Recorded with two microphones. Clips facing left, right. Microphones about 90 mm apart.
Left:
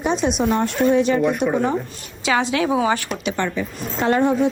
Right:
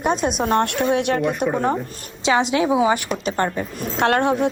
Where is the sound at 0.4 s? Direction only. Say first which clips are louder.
Even; 60° right (ahead or behind).